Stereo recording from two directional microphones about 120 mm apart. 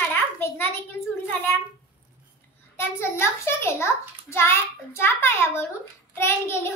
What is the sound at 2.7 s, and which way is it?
A woman's voice, 20° left (ahead or behind).